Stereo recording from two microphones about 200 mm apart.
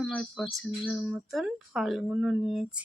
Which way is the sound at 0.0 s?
Centre (ahead or behind).